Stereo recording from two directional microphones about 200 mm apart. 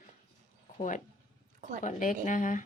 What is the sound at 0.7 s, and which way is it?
Speech, 40° left (ahead or behind).